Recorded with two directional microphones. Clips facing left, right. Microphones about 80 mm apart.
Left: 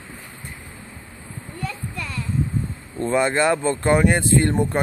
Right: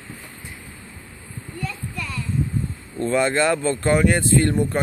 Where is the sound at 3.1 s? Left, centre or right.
Centre.